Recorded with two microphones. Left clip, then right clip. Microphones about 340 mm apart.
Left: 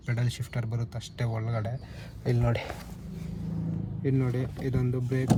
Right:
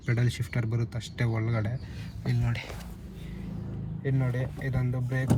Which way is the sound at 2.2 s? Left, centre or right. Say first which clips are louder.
Left 6 dB; centre.